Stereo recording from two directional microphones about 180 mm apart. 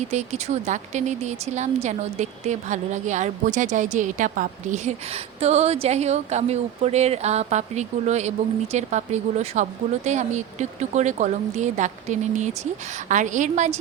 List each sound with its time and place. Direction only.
0.0 s a woman's voice: 40° right (ahead or behind)